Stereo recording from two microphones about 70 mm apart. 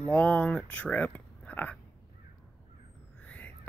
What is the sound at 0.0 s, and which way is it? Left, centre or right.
Speech, centre.